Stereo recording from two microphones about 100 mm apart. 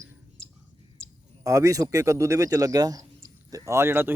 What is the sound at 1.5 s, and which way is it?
A man's voice, 35° right (ahead or behind).